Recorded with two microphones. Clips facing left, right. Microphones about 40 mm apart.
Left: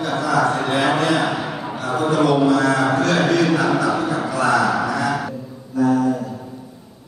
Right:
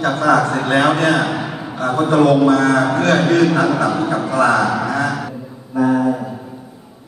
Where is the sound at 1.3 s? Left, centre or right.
Centre.